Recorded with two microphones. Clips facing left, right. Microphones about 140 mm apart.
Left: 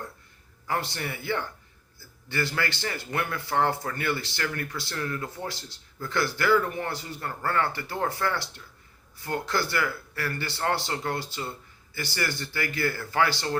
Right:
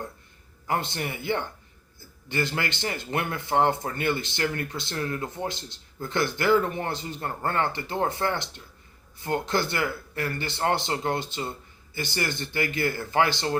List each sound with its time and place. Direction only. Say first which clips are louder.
0.7 s a man's voice: right 2 dB; 20° right (ahead or behind)